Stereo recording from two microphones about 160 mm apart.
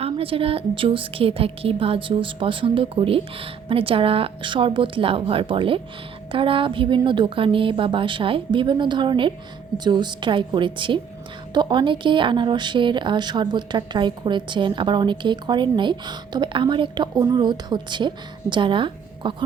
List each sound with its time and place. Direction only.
0.0 s a woman's voice: 35° right (ahead or behind)